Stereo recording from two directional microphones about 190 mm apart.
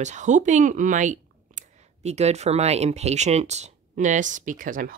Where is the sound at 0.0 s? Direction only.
40° right (ahead or behind).